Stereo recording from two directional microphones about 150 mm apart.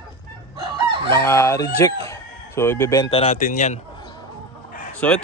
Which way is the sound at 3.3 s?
55° left (ahead or behind).